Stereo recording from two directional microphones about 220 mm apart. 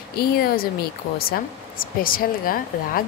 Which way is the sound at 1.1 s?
40° left (ahead or behind).